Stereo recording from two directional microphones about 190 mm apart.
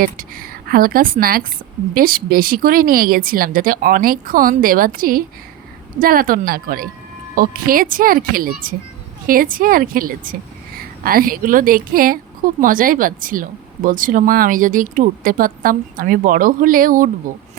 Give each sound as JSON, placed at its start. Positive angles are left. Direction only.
{"t": 0.0, "sound": "speech", "side_deg": -50}